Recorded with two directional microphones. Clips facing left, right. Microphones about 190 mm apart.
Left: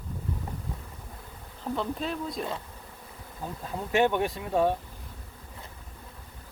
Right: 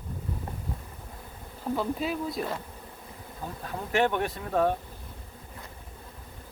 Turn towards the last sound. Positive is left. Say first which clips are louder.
# left 1 dB
turn(degrees=15)  # may be behind; listen again after turning